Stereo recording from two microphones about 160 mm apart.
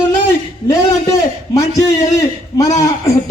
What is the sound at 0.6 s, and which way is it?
A man's voice, 20° left (ahead or behind).